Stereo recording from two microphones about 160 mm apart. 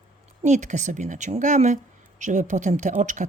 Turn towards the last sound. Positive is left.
turn(degrees=-50)  # may be behind; listen again after turning